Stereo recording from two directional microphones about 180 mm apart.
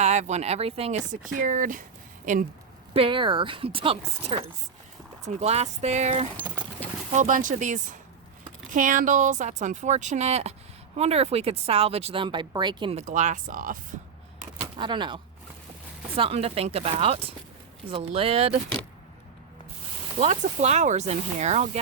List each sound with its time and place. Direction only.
0.0 s speech: 40° right (ahead or behind)
2.9 s speech: 30° right (ahead or behind); by 13.7 s 50° right (ahead or behind)
14.8 s speech: 25° right (ahead or behind)
20.1 s speech: 40° right (ahead or behind)